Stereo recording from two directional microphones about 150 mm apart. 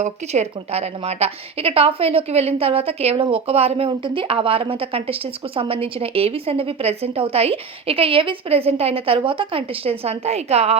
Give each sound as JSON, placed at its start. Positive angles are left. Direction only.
{"t": 0.0, "sound": "a woman's voice", "side_deg": -45}